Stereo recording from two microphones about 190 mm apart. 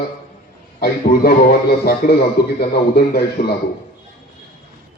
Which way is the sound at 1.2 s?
50° left (ahead or behind).